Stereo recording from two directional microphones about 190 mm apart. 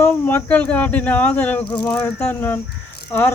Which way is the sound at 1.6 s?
25° left (ahead or behind).